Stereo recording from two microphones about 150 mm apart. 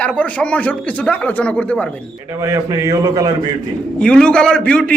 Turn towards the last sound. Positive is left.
turn(degrees=5)  # may be behind; listen again after turning